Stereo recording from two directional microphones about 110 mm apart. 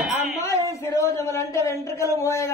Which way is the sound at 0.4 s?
30° left (ahead or behind).